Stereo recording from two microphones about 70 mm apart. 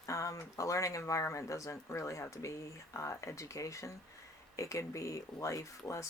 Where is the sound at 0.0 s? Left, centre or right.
Left.